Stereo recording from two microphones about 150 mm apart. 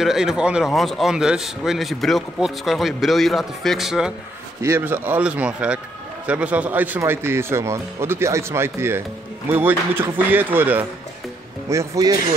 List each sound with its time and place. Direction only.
0.0 s a man's voice: 5° right (ahead or behind)
4.6 s a man's voice: 15° right (ahead or behind)